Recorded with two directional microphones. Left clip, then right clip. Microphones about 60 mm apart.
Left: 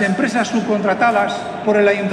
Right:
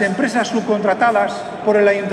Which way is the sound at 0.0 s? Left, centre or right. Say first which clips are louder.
Even; right.